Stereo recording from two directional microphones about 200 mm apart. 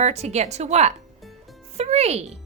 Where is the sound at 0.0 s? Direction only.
35° right (ahead or behind).